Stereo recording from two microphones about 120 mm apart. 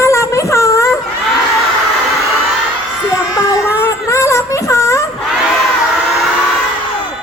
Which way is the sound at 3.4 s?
25° left (ahead or behind).